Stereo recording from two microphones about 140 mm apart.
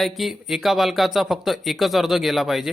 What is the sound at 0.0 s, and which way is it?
Speech, centre (ahead or behind).